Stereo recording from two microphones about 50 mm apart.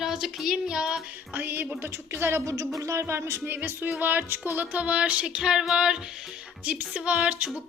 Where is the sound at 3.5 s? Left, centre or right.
Right.